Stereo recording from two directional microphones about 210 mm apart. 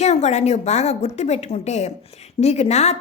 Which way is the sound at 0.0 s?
30° left (ahead or behind).